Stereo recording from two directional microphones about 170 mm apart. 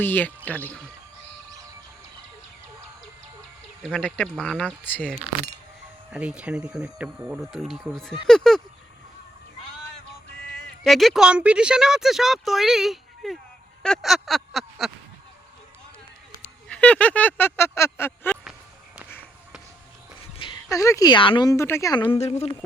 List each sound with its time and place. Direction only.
0.0 s speech: 10° left (ahead or behind)
3.9 s speech: 5° left (ahead or behind)
6.1 s speech: 5° right (ahead or behind)
10.8 s speech: centre (ahead or behind)
13.8 s a sound: centre (ahead or behind)
16.6 s speech: 5° left (ahead or behind)
20.4 s speech: 25° left (ahead or behind)
22.1 s a woman's voice: 40° left (ahead or behind)